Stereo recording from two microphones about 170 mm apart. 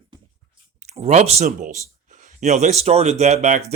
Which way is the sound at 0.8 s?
40° right (ahead or behind).